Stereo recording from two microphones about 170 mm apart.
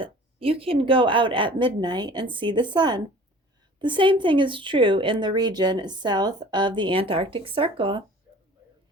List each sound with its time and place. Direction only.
0.0 s speech: 35° right (ahead or behind)